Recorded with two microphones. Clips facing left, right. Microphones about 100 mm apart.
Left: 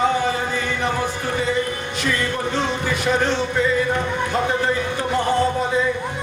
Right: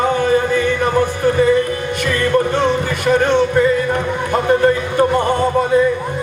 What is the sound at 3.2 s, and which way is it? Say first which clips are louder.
Music: right 7 dB; 50° right (ahead or behind).